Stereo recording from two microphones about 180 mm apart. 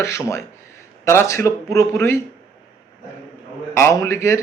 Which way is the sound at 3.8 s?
15° left (ahead or behind).